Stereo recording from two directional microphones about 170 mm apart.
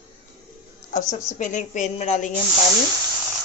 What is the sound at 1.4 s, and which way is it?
Speech, 45° left (ahead or behind).